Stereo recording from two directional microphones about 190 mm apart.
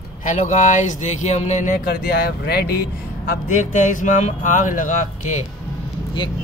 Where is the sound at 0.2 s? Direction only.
40° left (ahead or behind).